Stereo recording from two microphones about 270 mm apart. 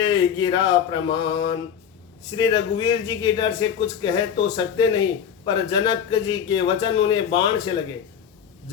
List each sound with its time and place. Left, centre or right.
0.3 s speech: centre